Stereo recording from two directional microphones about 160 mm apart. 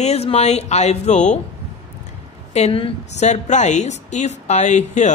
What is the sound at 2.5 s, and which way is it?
A woman's voice, 40° left (ahead or behind).